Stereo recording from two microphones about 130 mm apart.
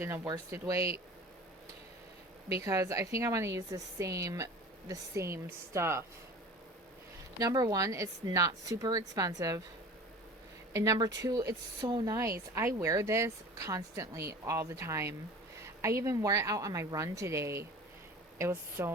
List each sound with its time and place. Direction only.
0.3 s speech: 25° right (ahead or behind)
2.5 s speech: 25° right (ahead or behind)
7.3 s speech: 30° right (ahead or behind)
10.7 s speech: 25° right (ahead or behind)